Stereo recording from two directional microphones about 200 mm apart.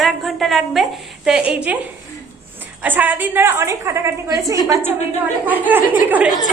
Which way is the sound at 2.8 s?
10° right (ahead or behind).